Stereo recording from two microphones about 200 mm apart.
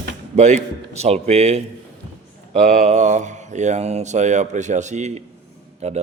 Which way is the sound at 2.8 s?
35° right (ahead or behind).